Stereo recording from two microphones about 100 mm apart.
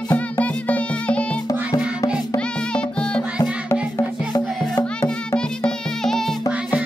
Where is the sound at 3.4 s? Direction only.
40° left (ahead or behind).